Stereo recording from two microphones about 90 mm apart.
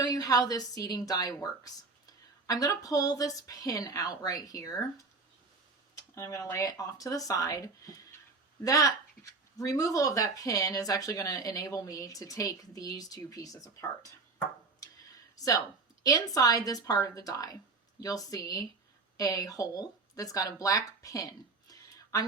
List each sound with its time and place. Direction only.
0.0 s a woman's voice: 45° left (ahead or behind)
5.9 s speech: 35° left (ahead or behind)
14.8 s a sound: 40° left (ahead or behind)
16.0 s a woman's voice: 45° left (ahead or behind)